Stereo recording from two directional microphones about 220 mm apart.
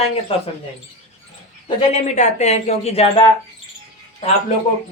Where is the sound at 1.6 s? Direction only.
30° left (ahead or behind).